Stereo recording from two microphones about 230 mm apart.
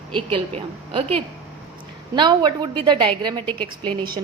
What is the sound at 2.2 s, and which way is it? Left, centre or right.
A woman's voice, centre.